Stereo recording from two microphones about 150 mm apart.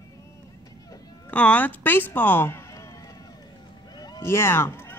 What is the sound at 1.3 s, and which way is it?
Speech, 10° left (ahead or behind).